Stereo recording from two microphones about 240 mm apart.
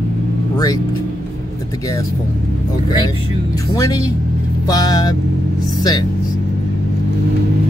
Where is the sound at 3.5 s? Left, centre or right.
Centre.